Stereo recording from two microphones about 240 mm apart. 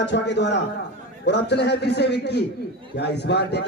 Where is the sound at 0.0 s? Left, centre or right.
Left.